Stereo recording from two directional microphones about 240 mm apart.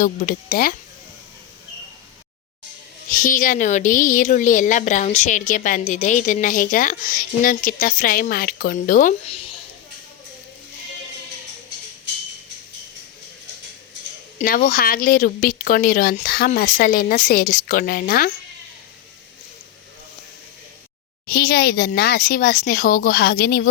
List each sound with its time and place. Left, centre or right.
0.0 s speech: left
3.1 s speech: left
14.3 s speech: left
21.2 s speech: left